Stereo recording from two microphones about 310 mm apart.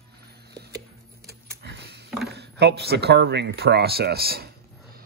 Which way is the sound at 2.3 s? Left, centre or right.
Right.